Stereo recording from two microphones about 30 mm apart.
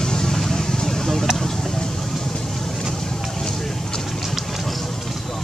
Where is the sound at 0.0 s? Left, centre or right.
Centre.